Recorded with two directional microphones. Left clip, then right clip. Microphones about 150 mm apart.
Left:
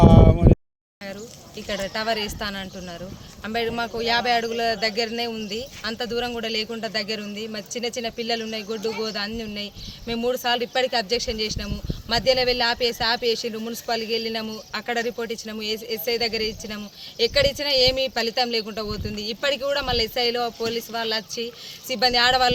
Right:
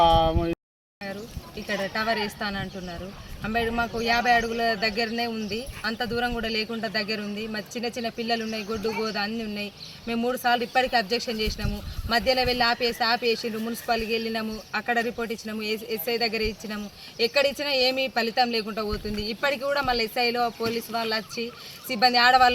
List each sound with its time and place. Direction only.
1.6 s speech: 30° left (ahead or behind)